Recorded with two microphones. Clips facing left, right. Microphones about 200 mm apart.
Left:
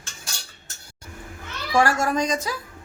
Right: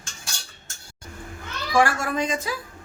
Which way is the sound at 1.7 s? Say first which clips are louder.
Left 1 dB; 40° left (ahead or behind).